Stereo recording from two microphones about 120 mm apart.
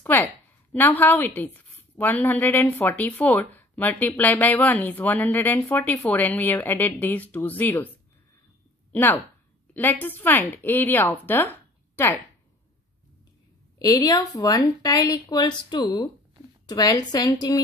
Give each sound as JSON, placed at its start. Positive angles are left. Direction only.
{"t": 0.0, "sound": "a woman's voice", "side_deg": 15}
{"t": 8.9, "sound": "a woman's voice", "side_deg": 15}
{"t": 13.7, "sound": "a woman's voice", "side_deg": 35}